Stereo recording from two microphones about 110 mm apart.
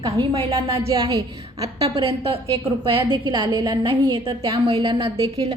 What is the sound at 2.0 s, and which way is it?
A woman's voice, 60° right (ahead or behind).